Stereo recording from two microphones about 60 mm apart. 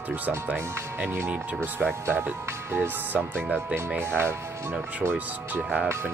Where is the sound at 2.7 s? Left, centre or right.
Right.